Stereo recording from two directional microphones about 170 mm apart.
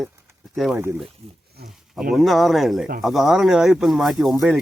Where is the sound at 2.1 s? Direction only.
Centre (ahead or behind).